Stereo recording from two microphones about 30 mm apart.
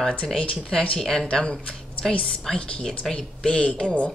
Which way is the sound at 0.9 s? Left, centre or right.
Centre.